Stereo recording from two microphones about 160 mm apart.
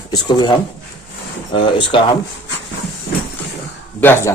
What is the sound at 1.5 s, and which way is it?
Speech, 30° left (ahead or behind).